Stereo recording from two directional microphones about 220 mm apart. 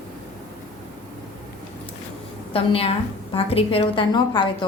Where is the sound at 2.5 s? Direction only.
25° left (ahead or behind).